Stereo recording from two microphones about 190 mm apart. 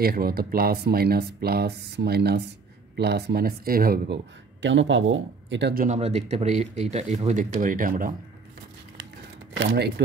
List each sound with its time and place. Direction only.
0.0 s speech: 55° right (ahead or behind)
4.6 s a man's voice: 80° right; by 5.9 s 65° right (ahead or behind)
5.9 s speech: 35° right (ahead or behind)
9.6 s speech: 60° right (ahead or behind)